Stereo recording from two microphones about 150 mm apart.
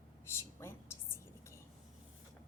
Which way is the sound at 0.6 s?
15° left (ahead or behind).